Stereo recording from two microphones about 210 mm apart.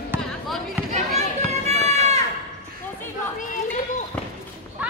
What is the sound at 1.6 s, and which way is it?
Run, 30° right (ahead or behind).